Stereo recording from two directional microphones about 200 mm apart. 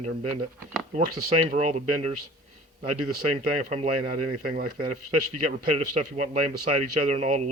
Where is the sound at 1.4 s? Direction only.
35° right (ahead or behind).